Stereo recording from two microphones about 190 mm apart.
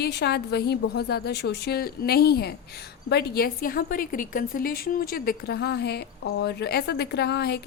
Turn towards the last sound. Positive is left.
turn(degrees=60)  # may be behind; listen again after turning